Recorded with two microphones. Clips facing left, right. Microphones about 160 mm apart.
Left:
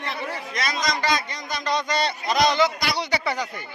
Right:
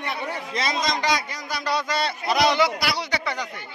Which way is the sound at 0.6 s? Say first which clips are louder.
Right 1 dB; 25° right (ahead or behind).